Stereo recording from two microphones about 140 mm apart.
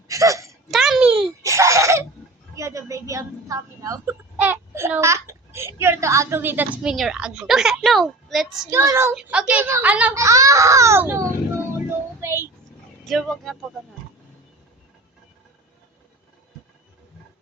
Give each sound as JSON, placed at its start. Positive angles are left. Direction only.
{"t": 0.1, "sound": "hiccup", "side_deg": -25}
{"t": 0.7, "sound": "a sound", "side_deg": 0}
{"t": 1.4, "sound": "laughter", "side_deg": -20}
{"t": 2.6, "sound": "a sound", "side_deg": -20}
{"t": 5.8, "sound": "a woman's voice", "side_deg": -20}
{"t": 6.9, "sound": "a child's voice", "side_deg": 0}
{"t": 8.7, "sound": "a woman's voice", "side_deg": -20}
{"t": 9.1, "sound": "a woman's voice", "side_deg": -5}
{"t": 10.2, "sound": "speech", "side_deg": -20}
{"t": 11.9, "sound": "music", "side_deg": -20}
{"t": 13.1, "sound": "a child's voice", "side_deg": 0}